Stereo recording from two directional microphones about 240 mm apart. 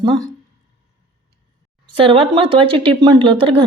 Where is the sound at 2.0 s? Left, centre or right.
Right.